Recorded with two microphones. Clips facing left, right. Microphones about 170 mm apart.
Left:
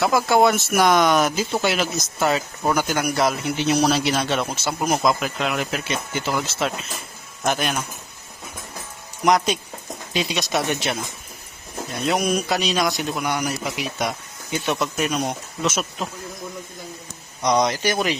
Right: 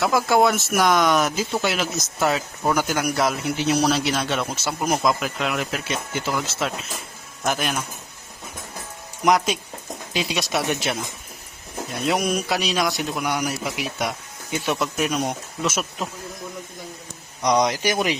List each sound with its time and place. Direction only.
0.0 s speech: centre (ahead or behind)
9.2 s speech: 5° right (ahead or behind)
12.0 s speech: 5° right (ahead or behind)
17.4 s speech: 10° right (ahead or behind)